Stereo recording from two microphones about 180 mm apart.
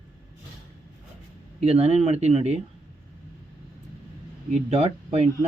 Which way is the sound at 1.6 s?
35° right (ahead or behind).